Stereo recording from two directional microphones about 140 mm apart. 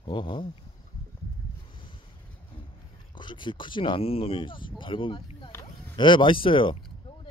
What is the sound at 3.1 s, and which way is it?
Speech, 35° left (ahead or behind).